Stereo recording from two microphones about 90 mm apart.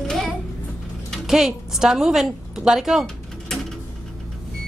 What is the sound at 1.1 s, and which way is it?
A woman's voice, 5° right (ahead or behind).